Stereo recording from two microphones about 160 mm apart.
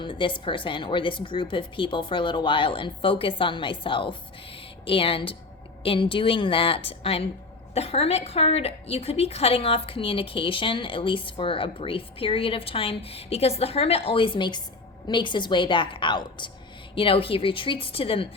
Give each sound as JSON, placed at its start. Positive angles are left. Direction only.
{"t": 0.0, "sound": "a woman's voice", "side_deg": 30}